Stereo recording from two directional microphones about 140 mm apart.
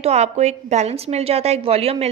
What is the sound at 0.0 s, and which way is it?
A woman's voice, 50° right (ahead or behind).